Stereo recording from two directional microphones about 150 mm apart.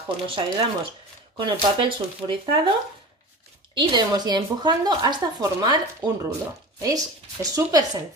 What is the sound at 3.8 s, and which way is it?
A woman's voice, 30° right (ahead or behind).